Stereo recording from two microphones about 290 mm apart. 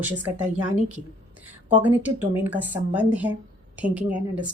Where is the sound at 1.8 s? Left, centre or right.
Centre.